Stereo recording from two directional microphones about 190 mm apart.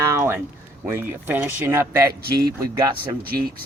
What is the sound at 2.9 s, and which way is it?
Speech, 50° right (ahead or behind).